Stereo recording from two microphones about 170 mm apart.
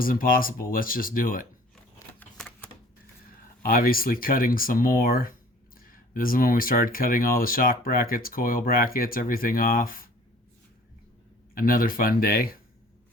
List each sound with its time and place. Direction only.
0.0 s speech: 55° left (ahead or behind)
1.7 s a sound: 5° left (ahead or behind)
3.6 s speech: 55° left (ahead or behind)
11.5 s speech: 55° left (ahead or behind)